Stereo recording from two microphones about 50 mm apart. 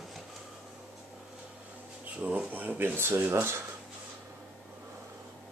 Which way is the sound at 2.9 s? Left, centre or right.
Right.